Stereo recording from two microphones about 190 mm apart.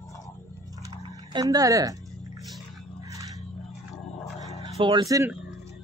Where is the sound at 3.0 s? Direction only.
15° right (ahead or behind).